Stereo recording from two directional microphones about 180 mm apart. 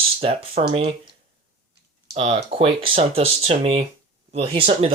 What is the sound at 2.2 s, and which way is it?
Speech, 30° right (ahead or behind).